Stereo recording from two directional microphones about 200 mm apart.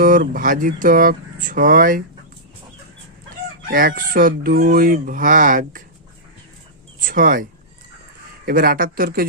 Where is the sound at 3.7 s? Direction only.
45° right (ahead or behind).